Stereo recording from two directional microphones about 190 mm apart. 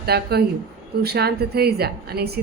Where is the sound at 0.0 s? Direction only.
55° right (ahead or behind).